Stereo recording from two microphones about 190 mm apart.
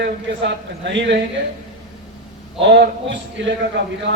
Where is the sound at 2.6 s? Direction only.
65° right (ahead or behind).